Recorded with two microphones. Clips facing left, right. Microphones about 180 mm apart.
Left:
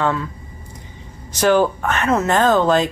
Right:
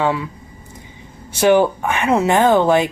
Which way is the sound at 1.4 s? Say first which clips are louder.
Right 2 dB; 15° right (ahead or behind).